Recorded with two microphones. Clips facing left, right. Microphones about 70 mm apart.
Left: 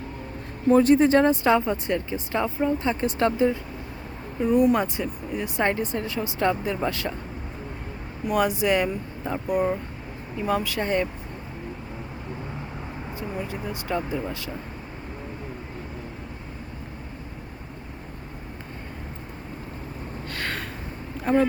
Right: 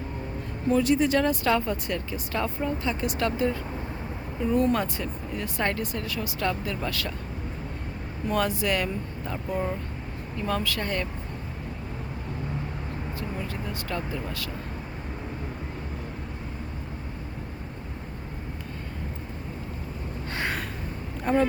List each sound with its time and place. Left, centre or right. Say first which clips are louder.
0.7 s speech: left 5 dB; left
8.3 s speech: left 4 dB; centre
13.1 s speech: left 5 dB; centre
21.3 s speech: left 2 dB; centre